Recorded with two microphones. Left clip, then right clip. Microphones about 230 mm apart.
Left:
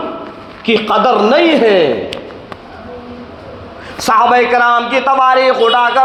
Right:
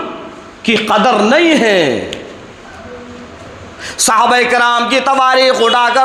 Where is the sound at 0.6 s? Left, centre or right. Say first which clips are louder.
Even; right.